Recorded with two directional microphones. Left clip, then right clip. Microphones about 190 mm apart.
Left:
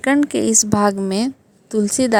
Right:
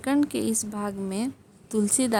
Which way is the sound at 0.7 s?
55° left (ahead or behind).